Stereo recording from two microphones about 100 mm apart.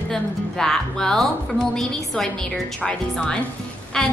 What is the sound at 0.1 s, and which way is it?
A woman's voice, 5° left (ahead or behind).